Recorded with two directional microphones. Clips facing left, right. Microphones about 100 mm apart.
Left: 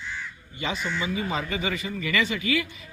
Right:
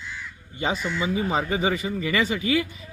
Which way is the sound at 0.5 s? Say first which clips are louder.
Right 3 dB; 35° right (ahead or behind).